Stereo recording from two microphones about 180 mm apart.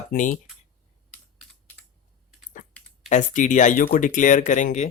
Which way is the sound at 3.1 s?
45° left (ahead or behind).